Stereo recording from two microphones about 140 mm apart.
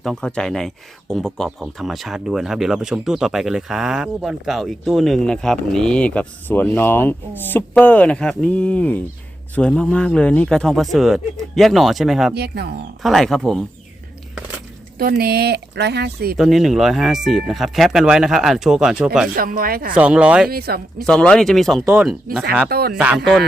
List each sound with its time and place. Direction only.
0.0 s speech: 5° left (ahead or behind)
16.4 s speech: centre (ahead or behind)
19.4 s speech: 90° right
20.0 s speech: 10° right (ahead or behind)
20.5 s speech: 90° right
21.1 s speech: 5° left (ahead or behind)
22.7 s speech: 90° right
23.0 s speech: 5° right (ahead or behind)